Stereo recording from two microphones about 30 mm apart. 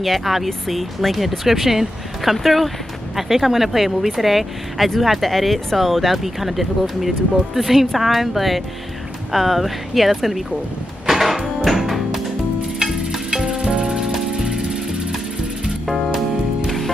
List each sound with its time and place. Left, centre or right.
0.0 s speech: centre
2.3 s speech: centre
11.1 s music: centre
13.7 s music: right
16.6 s music: centre